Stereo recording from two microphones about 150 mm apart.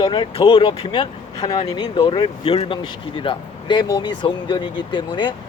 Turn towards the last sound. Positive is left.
turn(degrees=30)  # may be behind; listen again after turning